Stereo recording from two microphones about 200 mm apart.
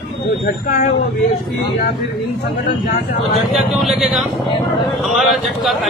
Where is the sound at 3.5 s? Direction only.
Centre (ahead or behind).